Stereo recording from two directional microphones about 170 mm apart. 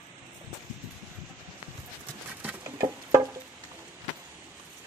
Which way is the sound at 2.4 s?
15° right (ahead or behind).